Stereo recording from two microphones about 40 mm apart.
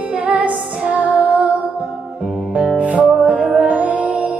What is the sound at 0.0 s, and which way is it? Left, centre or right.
Music, right.